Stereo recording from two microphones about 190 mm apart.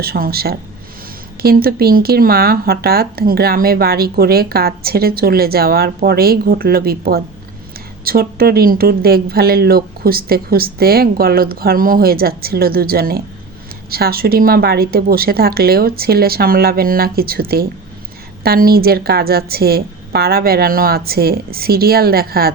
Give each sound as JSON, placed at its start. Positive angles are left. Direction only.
{"t": 0.0, "sound": "speech", "side_deg": -55}